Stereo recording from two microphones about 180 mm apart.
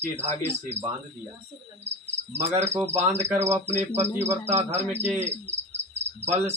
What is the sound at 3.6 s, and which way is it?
Cricket, 40° right (ahead or behind).